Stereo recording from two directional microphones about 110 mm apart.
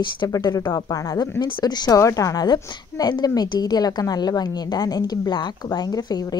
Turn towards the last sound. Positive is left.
turn(degrees=40)  # may be behind; listen again after turning